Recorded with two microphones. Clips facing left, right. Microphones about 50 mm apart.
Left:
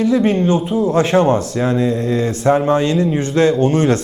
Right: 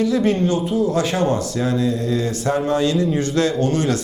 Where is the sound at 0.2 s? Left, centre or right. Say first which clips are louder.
Left 3 dB; left.